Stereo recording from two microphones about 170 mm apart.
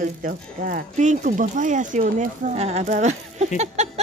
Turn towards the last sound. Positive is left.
turn(degrees=-40)  # may be behind; listen again after turning